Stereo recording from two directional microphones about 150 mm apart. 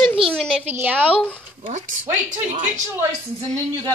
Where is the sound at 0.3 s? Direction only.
Centre (ahead or behind).